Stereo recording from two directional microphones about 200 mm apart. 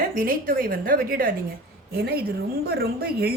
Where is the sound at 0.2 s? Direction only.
45° right (ahead or behind).